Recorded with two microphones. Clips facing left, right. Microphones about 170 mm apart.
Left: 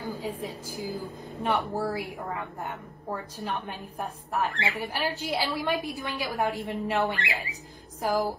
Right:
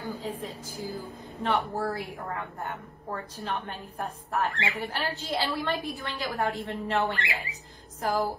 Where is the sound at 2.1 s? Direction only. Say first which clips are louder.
Left 1 dB; centre (ahead or behind).